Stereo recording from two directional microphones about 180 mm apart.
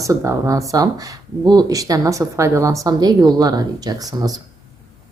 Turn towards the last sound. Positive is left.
turn(degrees=-20)  # may be behind; listen again after turning